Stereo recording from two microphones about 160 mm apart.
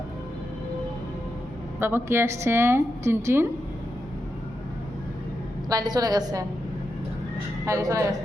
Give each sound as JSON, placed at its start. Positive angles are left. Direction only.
{"t": 1.8, "sound": "a woman's voice", "side_deg": -15}
{"t": 5.6, "sound": "a woman's voice", "side_deg": -25}
{"t": 7.6, "sound": "a woman's voice", "side_deg": -20}